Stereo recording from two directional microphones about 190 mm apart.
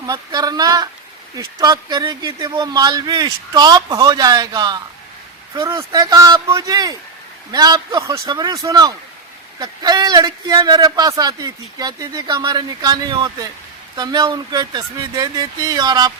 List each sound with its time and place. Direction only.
0.0 s speech: 20° right (ahead or behind)